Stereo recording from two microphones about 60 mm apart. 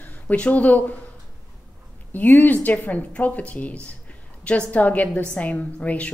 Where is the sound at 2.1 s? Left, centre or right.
Left.